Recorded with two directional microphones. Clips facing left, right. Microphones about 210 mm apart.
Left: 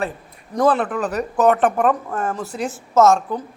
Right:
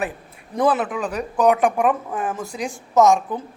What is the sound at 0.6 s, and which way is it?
Speech, 10° right (ahead or behind).